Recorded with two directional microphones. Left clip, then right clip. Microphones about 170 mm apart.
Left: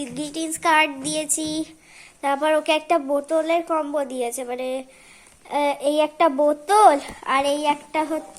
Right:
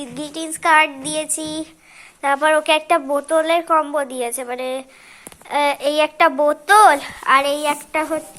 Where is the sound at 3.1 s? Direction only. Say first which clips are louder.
Right 4 dB; 10° left (ahead or behind).